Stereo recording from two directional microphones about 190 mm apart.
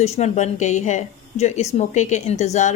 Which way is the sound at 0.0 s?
35° left (ahead or behind).